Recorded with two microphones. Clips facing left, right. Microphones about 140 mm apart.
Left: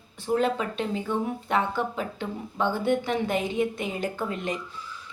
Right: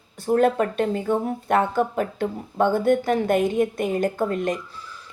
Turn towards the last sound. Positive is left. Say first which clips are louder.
# right 6 dB
turn(degrees=-45)  # may be behind; listen again after turning